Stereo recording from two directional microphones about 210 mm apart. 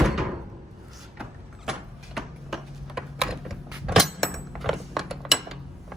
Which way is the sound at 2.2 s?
Centre (ahead or behind).